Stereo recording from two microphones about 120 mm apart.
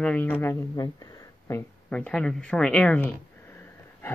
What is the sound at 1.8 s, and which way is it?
Speech, 10° left (ahead or behind).